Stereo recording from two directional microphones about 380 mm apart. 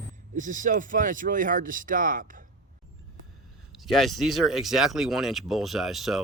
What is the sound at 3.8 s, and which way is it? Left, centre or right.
Speech, centre.